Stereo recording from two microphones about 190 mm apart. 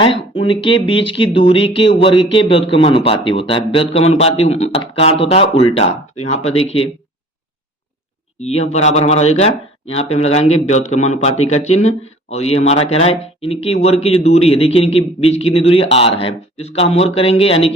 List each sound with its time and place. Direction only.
0.3 s speech: 25° left (ahead or behind)
8.4 s speech: 35° left (ahead or behind)